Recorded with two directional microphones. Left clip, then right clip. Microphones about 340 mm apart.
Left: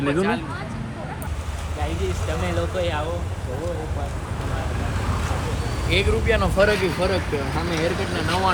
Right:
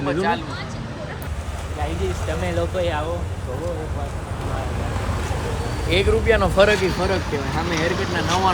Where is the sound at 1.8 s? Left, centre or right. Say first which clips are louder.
Right 2 dB; centre.